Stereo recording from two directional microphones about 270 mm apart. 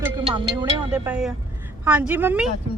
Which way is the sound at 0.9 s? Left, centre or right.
Centre.